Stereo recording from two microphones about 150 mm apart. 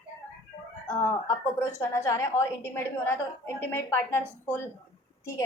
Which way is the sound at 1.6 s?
15° left (ahead or behind).